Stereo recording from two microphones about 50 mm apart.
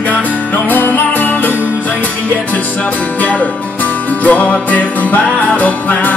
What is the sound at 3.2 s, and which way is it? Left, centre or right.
Music, left.